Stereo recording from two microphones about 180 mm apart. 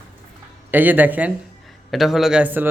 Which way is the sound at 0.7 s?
10° right (ahead or behind).